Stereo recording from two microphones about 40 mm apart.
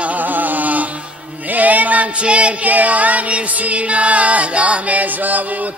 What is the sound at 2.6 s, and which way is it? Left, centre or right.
Chant, right.